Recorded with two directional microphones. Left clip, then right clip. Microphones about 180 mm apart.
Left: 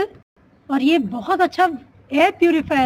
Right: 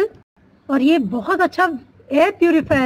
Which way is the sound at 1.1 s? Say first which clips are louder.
Right 1 dB; 50° right (ahead or behind).